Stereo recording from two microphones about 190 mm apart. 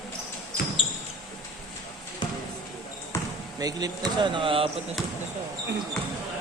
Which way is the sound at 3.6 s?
20° right (ahead or behind).